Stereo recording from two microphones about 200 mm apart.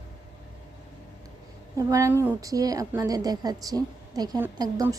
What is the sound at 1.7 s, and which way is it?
A woman's voice, 15° right (ahead or behind).